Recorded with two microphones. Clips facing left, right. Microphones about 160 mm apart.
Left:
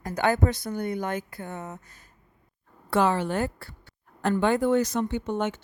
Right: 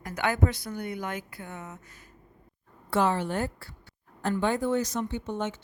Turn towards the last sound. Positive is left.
turn(degrees=70)  # may be behind; listen again after turning